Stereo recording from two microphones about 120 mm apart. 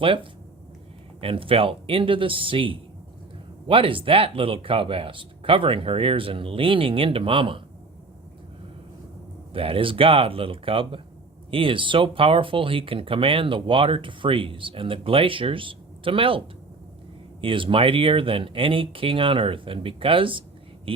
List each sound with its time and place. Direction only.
0.0 s speech: 45° right (ahead or behind)
9.5 s speech: 50° right (ahead or behind)
17.4 s speech: 45° right (ahead or behind)